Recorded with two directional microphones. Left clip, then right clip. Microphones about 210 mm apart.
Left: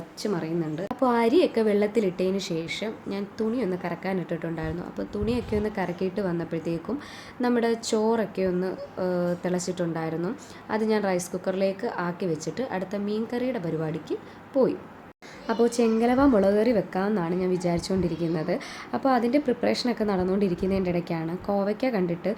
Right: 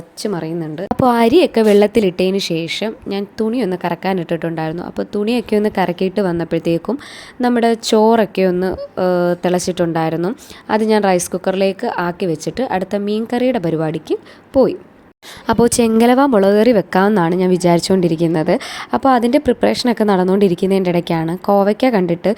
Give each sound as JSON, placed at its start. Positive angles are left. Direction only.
{"t": 0.2, "sound": "a woman's voice", "side_deg": -35}
{"t": 15.4, "sound": "a woman's voice", "side_deg": -45}